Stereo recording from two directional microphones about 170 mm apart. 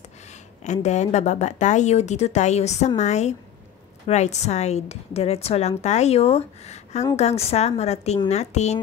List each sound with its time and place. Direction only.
0.7 s a woman's voice: 45° left (ahead or behind)